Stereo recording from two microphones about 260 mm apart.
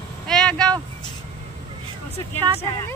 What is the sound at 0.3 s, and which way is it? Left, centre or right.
Vehicle, centre.